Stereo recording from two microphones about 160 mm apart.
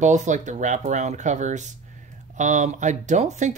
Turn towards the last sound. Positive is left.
turn(degrees=-45)  # may be behind; listen again after turning